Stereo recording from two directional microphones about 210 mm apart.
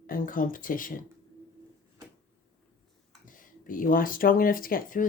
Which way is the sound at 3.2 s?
40° left (ahead or behind).